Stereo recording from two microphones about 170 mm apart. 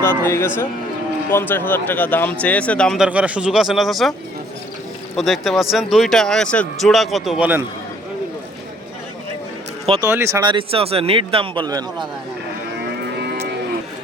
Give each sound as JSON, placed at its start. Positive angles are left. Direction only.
{"t": 0.0, "sound": "speech", "side_deg": 15}
{"t": 3.1, "sound": "speech", "side_deg": -10}
{"t": 5.1, "sound": "speech", "side_deg": 0}
{"t": 10.0, "sound": "speech", "side_deg": -15}